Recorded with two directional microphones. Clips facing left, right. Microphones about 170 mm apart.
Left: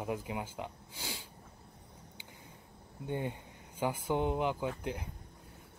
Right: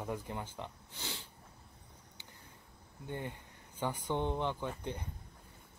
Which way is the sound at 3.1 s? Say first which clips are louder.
Left 5 dB; 15° left (ahead or behind).